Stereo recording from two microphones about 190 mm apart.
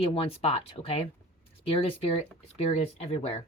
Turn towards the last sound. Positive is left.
turn(degrees=35)  # may be behind; listen again after turning